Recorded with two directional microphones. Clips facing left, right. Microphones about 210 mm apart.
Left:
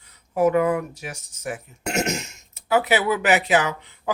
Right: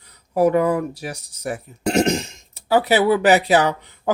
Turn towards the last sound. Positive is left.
turn(degrees=-35)  # may be behind; listen again after turning